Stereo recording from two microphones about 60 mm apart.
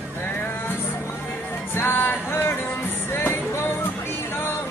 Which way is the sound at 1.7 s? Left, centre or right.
Left.